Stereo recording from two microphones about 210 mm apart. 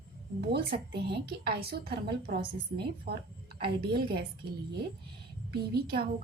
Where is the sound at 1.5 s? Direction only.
50° right (ahead or behind).